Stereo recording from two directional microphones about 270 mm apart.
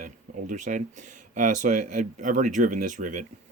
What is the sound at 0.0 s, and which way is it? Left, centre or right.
Speech, right.